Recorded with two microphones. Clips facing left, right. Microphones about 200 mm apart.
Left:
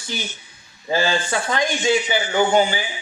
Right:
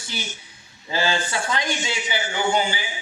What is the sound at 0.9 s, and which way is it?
A man's voice, 50° left (ahead or behind).